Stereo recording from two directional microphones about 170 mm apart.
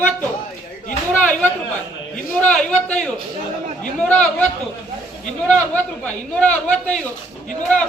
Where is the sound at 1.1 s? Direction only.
10° left (ahead or behind).